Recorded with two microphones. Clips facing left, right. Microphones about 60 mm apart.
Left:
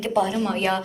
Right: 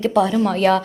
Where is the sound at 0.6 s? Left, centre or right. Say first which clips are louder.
Right 9 dB; right.